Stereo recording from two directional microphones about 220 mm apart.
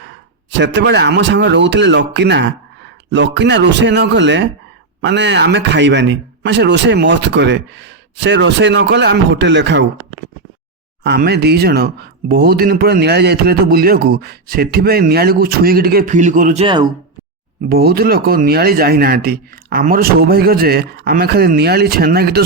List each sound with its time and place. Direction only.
0.5 s speech: 50° right (ahead or behind)
11.0 s speech: 50° right (ahead or behind)
16.6 s speech: 20° right (ahead or behind)
17.7 s speech: 45° right (ahead or behind)